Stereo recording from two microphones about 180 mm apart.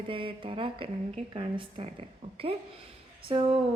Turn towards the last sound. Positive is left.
turn(degrees=-30)  # may be behind; listen again after turning